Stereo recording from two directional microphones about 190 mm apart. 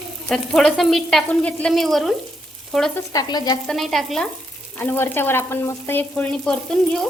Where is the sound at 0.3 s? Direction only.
Centre (ahead or behind).